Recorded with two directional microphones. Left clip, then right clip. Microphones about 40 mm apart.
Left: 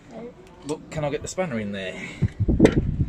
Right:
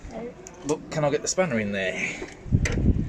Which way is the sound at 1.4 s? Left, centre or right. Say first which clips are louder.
Right 2 dB; centre.